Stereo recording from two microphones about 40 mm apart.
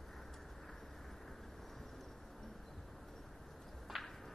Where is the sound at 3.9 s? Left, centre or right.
Centre.